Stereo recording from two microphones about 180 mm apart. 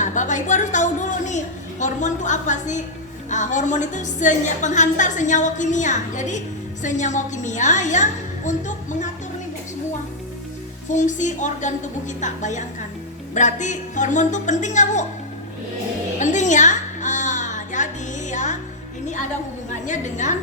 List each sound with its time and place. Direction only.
0.0 s a woman's voice: 45° left (ahead or behind)
10.8 s a woman's voice: 45° left (ahead or behind)
16.1 s a sound: 40° left (ahead or behind)
18.3 s music: 40° left (ahead or behind)
19.8 s a woman's voice: 40° left (ahead or behind)